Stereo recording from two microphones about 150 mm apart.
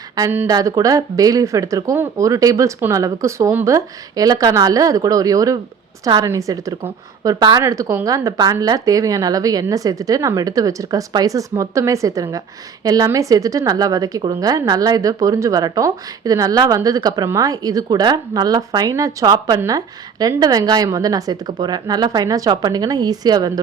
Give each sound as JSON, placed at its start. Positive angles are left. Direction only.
{"t": 0.2, "sound": "speech", "side_deg": -15}